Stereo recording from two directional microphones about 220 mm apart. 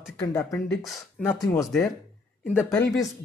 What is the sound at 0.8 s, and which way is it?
Speech, centre (ahead or behind).